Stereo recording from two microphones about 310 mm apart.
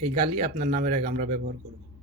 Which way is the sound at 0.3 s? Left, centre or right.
Right.